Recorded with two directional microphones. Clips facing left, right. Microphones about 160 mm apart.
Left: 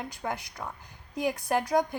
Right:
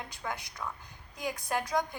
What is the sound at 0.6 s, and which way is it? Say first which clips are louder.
Speech: left 1 dB; 40° left (ahead or behind).